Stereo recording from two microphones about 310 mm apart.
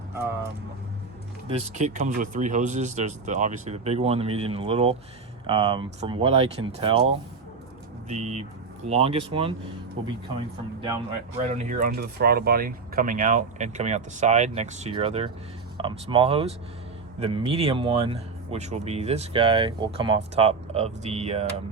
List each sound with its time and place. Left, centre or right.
1.5 s speech: centre
10.0 s speech: right
11.3 s speech: right